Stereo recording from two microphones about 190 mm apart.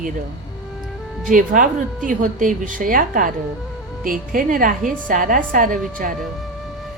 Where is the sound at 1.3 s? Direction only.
45° right (ahead or behind).